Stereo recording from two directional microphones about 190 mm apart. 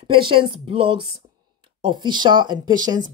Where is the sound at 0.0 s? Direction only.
25° right (ahead or behind).